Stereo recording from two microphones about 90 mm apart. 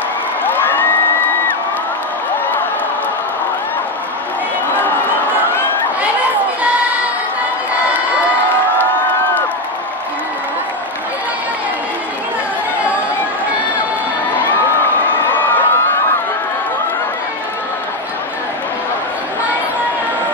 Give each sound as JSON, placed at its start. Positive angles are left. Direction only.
{"t": 0.4, "sound": "crowd", "side_deg": 20}
{"t": 15.3, "sound": "crowd", "side_deg": 20}